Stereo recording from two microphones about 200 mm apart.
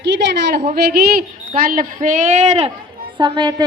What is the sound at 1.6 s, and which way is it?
Speech, 45° right (ahead or behind).